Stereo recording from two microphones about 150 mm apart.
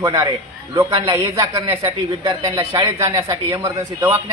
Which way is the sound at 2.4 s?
20° right (ahead or behind).